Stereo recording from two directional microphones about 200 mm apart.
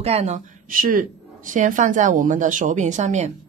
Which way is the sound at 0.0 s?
30° right (ahead or behind).